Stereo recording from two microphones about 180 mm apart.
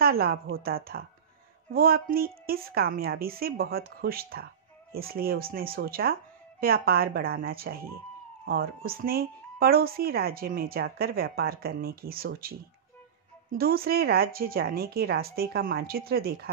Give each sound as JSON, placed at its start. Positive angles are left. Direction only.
{"t": 0.0, "sound": "speech", "side_deg": -55}